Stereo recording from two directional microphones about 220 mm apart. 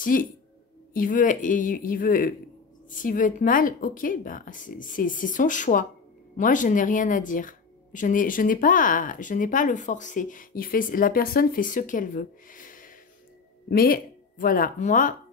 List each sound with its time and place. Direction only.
0.0 s a woman's voice: 40° left (ahead or behind)